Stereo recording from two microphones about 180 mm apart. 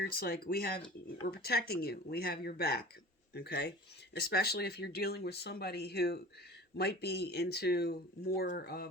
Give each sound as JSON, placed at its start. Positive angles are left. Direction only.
{"t": 0.0, "sound": "speech", "side_deg": 60}